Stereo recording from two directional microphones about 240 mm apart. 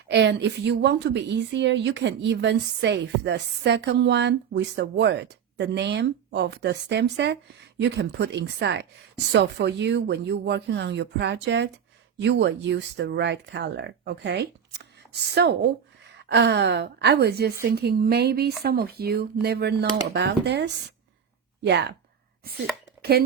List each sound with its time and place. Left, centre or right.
0.1 s a woman's voice: right